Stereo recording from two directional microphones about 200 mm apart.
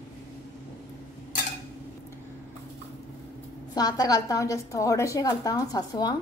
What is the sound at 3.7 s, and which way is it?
A woman's voice, 20° left (ahead or behind).